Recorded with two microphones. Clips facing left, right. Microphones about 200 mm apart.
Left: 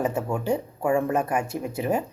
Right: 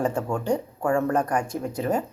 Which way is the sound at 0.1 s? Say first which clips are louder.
Even; 5° left (ahead or behind).